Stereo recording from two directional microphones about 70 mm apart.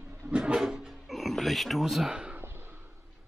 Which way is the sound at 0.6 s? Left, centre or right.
Centre.